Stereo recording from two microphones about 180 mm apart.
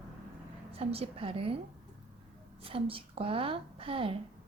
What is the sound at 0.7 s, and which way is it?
Speech, 30° right (ahead or behind).